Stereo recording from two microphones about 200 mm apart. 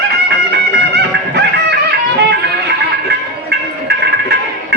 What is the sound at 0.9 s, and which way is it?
Music, 55° right (ahead or behind).